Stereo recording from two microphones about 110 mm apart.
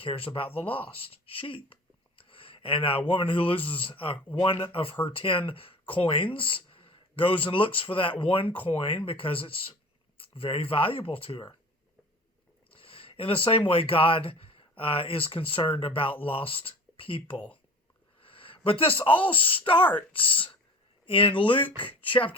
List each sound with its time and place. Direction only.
0.0 s speech: 55° left (ahead or behind)
12.7 s speech: 55° left (ahead or behind)